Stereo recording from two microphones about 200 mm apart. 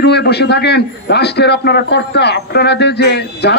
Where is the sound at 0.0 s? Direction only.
55° left (ahead or behind).